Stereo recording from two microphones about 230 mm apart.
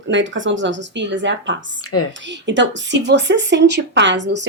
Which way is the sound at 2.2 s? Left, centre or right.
Right.